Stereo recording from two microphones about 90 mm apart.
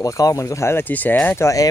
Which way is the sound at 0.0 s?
40° left (ahead or behind).